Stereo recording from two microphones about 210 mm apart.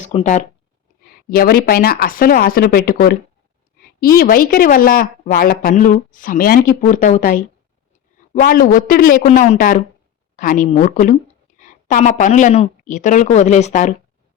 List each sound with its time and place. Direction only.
0.0 s speech: 35° left (ahead or behind)
1.0 s a woman's voice: 45° left (ahead or behind)